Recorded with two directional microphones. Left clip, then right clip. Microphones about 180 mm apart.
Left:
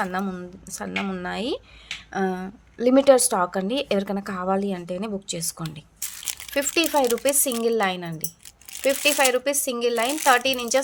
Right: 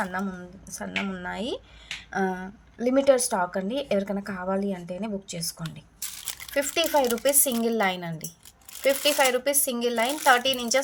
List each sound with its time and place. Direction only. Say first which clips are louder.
0.0 s a woman's voice: left 3 dB; 40° left (ahead or behind)
2.7 s a woman's voice: left 5 dB; 40° left (ahead or behind); by 10.8 s 20° left (ahead or behind)